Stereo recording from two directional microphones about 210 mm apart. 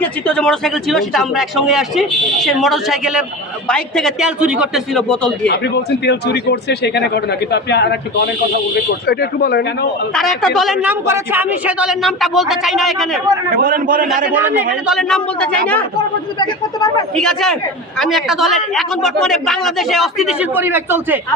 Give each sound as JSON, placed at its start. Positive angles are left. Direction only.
{"t": 0.0, "sound": "a woman's voice", "side_deg": 5}
{"t": 5.5, "sound": "speech", "side_deg": 55}
{"t": 10.2, "sound": "a woman's voice", "side_deg": 0}
{"t": 13.6, "sound": "a man's voice", "side_deg": -40}
{"t": 14.3, "sound": "a woman's voice", "side_deg": -10}
{"t": 16.4, "sound": "speech", "side_deg": 20}
{"t": 17.2, "sound": "a woman's voice", "side_deg": 0}